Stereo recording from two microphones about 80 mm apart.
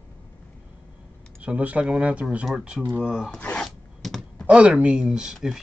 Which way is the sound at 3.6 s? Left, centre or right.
Centre.